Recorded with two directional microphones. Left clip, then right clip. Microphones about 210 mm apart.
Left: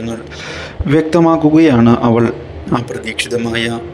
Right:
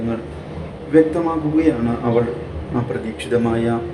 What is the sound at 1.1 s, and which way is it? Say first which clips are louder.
Speech: left 9 dB; 45° left (ahead or behind).